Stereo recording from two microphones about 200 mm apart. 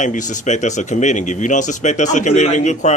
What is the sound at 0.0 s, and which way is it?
Speech, 40° left (ahead or behind).